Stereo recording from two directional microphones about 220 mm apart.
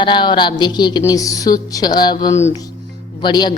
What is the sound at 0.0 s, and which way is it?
A woman's voice, 20° left (ahead or behind).